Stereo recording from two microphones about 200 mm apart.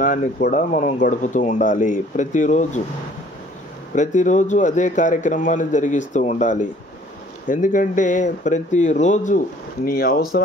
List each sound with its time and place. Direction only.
0.0 s speech: 40° left (ahead or behind)
3.9 s speech: 40° left (ahead or behind)